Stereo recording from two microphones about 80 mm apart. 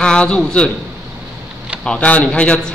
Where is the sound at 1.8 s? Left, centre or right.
Centre.